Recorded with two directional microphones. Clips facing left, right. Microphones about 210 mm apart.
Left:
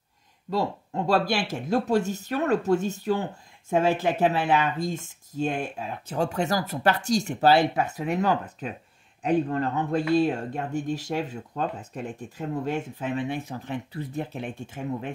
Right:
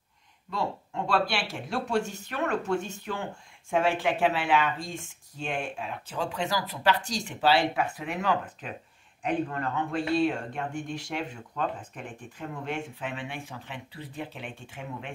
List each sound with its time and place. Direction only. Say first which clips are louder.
0.5 s speech: left 5 dB; 40° left (ahead or behind)